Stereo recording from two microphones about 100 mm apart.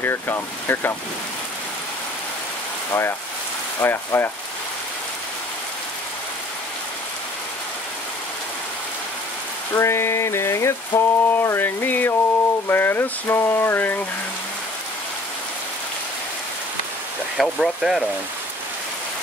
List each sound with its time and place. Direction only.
0.0 s speech: 20° left (ahead or behind)
2.9 s speech: 25° left (ahead or behind)
9.8 s speech: 25° left (ahead or behind)
17.4 s speech: centre (ahead or behind)